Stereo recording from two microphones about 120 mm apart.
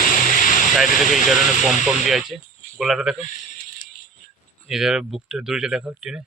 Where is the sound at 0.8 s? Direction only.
Centre (ahead or behind).